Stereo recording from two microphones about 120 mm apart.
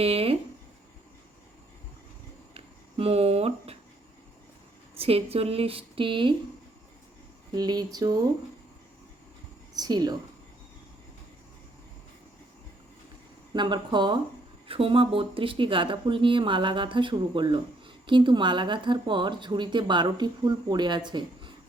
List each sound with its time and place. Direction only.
0.0 s a sound: 55° right (ahead or behind)
2.6 s a sound: 55° right (ahead or behind)
4.9 s speech: 55° right (ahead or behind)
7.5 s speech: 35° right (ahead or behind)
9.7 s speech: 35° right (ahead or behind)
13.5 s speech: 40° right (ahead or behind)